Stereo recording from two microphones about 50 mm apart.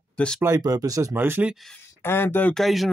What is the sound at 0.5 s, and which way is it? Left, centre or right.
Speech, right.